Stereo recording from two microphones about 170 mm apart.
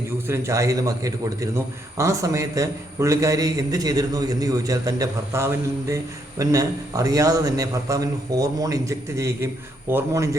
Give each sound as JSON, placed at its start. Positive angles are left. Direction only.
{"t": 0.3, "sound": "a man's voice", "side_deg": -20}